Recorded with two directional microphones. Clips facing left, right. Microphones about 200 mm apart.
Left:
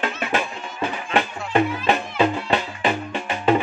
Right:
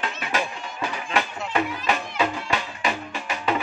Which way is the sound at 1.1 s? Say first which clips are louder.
Left 5 dB; 30° left (ahead or behind).